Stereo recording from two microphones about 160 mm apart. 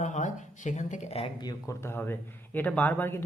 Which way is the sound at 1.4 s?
20° left (ahead or behind).